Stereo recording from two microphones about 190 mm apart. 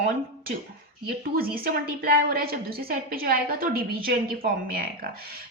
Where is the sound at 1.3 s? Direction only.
50° right (ahead or behind).